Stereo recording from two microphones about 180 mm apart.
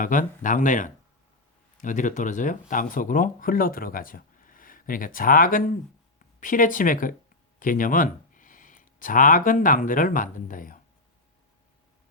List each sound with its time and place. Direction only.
0.0 s speech: 45° left (ahead or behind)